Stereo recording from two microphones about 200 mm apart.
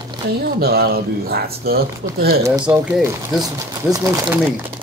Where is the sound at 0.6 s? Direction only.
50° right (ahead or behind).